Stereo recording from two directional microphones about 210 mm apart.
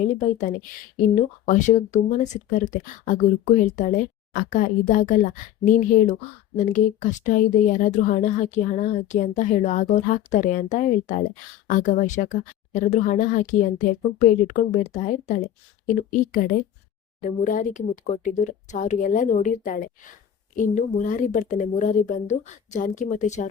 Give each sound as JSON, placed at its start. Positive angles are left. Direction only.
{"t": 0.0, "sound": "speech", "side_deg": 35}